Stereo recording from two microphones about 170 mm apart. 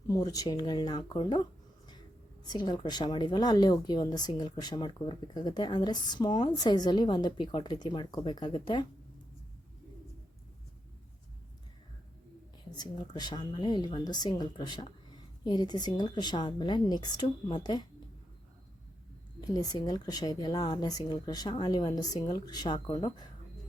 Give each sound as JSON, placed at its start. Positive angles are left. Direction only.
{"t": 0.1, "sound": "speech", "side_deg": 20}
{"t": 2.5, "sound": "speech", "side_deg": 25}
{"t": 12.7, "sound": "speech", "side_deg": 25}
{"t": 19.5, "sound": "speech", "side_deg": 20}